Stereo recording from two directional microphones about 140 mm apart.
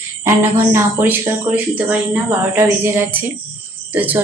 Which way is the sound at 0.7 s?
15° right (ahead or behind).